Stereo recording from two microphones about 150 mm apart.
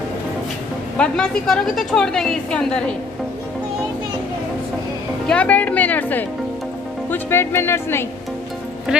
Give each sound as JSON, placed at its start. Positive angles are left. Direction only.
{"t": 0.9, "sound": "a woman's voice", "side_deg": 5}
{"t": 5.3, "sound": "speech", "side_deg": 10}